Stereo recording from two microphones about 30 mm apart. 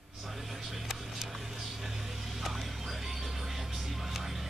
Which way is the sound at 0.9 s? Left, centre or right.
Centre.